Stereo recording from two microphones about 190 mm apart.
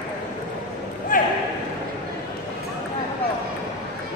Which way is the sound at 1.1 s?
45° left (ahead or behind).